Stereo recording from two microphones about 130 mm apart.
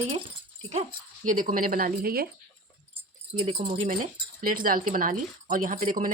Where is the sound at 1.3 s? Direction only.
90° right.